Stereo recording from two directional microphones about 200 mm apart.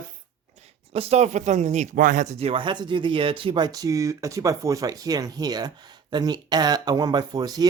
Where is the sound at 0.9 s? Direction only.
30° right (ahead or behind).